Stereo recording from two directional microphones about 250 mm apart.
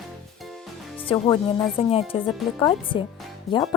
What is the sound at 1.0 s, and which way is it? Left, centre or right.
A woman's voice, centre.